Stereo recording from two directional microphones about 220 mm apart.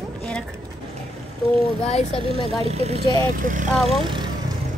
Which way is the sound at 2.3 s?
30° right (ahead or behind).